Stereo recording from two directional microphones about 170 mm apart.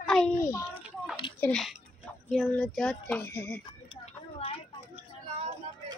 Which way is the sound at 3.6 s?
30° left (ahead or behind).